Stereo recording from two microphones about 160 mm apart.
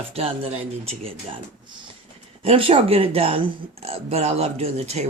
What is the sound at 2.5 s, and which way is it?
Speech, 35° right (ahead or behind).